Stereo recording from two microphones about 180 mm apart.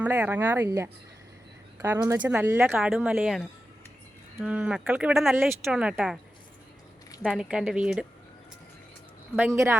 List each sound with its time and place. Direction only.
0.0 s speech: 10° right (ahead or behind)
2.2 s speech: 5° right (ahead or behind)
7.2 s speech: centre (ahead or behind)